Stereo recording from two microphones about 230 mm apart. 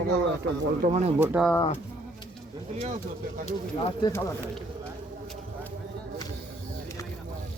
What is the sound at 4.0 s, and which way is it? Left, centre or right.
Speech, centre.